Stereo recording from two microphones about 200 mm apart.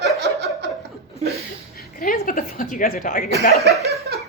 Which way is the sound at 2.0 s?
45° left (ahead or behind).